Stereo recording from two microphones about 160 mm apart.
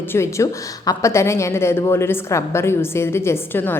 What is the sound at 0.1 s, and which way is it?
A woman's voice, 15° left (ahead or behind).